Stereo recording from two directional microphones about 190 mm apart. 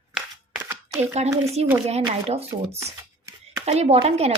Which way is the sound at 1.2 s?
35° right (ahead or behind).